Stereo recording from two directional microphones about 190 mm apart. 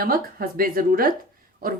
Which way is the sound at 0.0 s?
50° right (ahead or behind).